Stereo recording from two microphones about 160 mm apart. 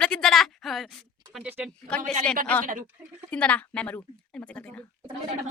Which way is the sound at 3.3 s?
10° left (ahead or behind).